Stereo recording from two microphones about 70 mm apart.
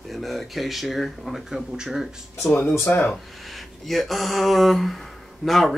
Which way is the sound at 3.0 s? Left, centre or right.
Centre.